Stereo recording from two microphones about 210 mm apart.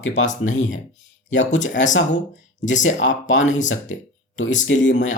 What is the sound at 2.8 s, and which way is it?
Speech, 65° left (ahead or behind).